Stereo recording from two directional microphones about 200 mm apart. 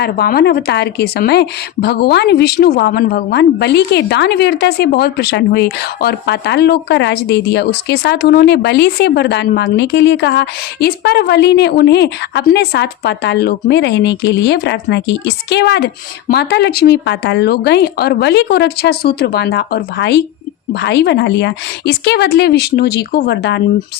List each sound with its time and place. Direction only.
0.0 s a woman's voice: 50° left (ahead or behind)